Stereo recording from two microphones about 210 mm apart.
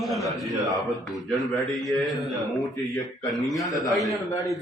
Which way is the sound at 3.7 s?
15° left (ahead or behind).